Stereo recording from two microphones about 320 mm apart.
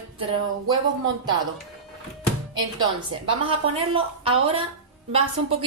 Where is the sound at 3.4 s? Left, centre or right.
Centre.